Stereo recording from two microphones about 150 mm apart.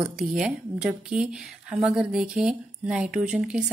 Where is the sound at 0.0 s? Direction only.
5° right (ahead or behind).